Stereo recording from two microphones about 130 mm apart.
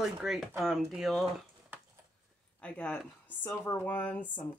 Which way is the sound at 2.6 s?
10° left (ahead or behind).